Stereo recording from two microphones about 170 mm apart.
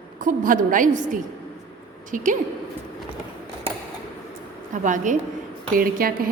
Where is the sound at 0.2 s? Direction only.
50° right (ahead or behind).